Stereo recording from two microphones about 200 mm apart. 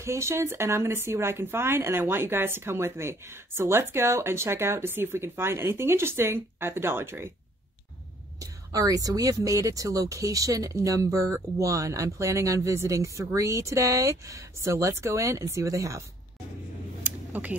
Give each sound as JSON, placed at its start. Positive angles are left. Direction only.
{"t": 0.0, "sound": "speech", "side_deg": -15}
{"t": 8.4, "sound": "speech", "side_deg": -15}
{"t": 17.0, "sound": "a sound", "side_deg": -5}